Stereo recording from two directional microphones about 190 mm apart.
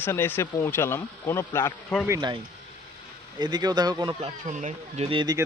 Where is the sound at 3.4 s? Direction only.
20° right (ahead or behind).